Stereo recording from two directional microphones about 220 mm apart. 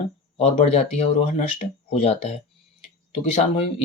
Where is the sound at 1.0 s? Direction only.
30° left (ahead or behind).